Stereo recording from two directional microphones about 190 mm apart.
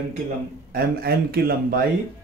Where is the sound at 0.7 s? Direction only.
55° right (ahead or behind).